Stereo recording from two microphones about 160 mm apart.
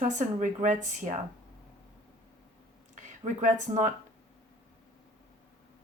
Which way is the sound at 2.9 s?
50° right (ahead or behind).